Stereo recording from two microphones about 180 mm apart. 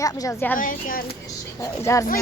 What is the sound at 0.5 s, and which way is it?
Speech, 50° left (ahead or behind).